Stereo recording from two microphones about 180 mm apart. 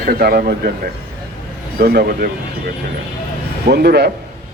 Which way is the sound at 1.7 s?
60° right (ahead or behind).